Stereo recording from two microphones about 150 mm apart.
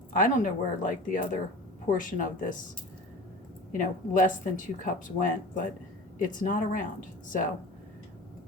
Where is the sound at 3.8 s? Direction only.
60° left (ahead or behind).